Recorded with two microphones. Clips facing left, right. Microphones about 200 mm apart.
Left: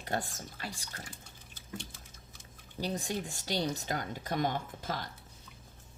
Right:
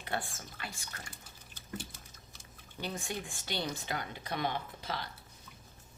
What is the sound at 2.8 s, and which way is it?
Speech, 40° left (ahead or behind).